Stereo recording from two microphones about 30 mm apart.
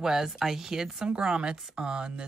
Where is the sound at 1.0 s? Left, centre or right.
Right.